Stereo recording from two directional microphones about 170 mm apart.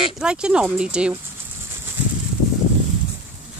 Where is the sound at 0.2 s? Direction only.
5° right (ahead or behind).